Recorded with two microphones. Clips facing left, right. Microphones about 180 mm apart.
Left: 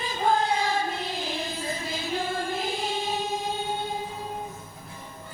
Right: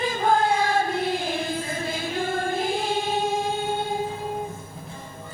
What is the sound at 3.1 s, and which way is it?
Music, 50° right (ahead or behind).